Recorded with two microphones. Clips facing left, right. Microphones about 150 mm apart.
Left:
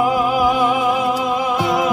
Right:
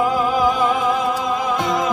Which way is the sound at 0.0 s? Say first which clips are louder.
Left 1 dB; 10° left (ahead or behind).